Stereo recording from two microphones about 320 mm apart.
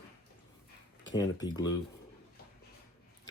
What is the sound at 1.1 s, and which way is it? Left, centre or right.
Speech, centre.